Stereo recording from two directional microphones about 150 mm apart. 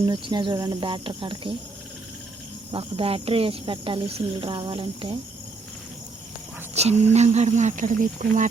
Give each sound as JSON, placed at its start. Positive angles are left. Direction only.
{"t": 0.0, "sound": "speech", "side_deg": -30}
{"t": 2.7, "sound": "speech", "side_deg": -40}
{"t": 6.7, "sound": "speech", "side_deg": -45}